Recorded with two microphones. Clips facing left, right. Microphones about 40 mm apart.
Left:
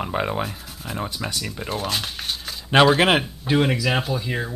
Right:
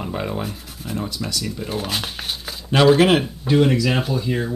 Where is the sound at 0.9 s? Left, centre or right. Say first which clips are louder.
Right 2 dB; left.